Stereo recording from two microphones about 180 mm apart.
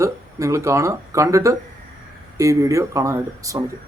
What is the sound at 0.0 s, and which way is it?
Speech, 15° right (ahead or behind).